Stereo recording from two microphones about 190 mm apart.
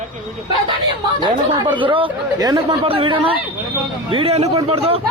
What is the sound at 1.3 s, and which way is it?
Speech, 25° right (ahead or behind).